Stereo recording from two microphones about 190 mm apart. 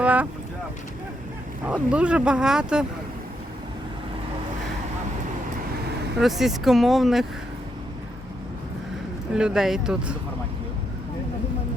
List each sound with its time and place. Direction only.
0.0 s vehicle: 10° right (ahead or behind)
1.6 s speech: 5° right (ahead or behind)
6.1 s speech: centre (ahead or behind)
9.3 s speech: 5° right (ahead or behind)